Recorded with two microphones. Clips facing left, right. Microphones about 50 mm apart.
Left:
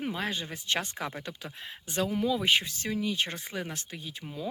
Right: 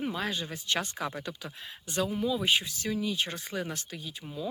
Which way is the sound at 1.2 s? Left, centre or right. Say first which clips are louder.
Even; left.